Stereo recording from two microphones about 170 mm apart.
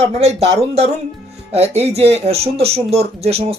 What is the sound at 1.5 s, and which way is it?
Speech, 40° right (ahead or behind).